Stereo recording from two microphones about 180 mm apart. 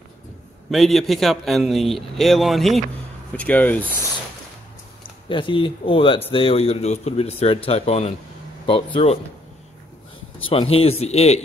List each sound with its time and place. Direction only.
0.7 s a man's voice: centre (ahead or behind)
5.3 s speech: 30° left (ahead or behind)
10.5 s speech: 30° left (ahead or behind)